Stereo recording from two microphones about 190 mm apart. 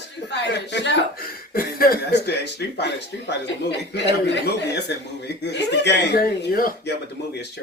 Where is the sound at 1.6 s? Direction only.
50° left (ahead or behind).